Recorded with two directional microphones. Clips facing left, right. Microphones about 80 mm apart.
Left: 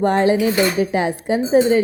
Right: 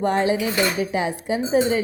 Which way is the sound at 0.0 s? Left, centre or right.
Left.